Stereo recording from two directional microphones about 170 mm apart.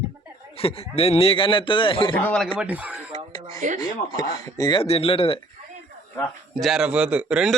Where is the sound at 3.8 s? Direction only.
20° left (ahead or behind).